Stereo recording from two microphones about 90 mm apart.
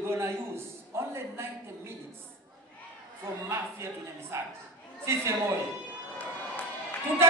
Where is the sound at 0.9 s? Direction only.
30° right (ahead or behind).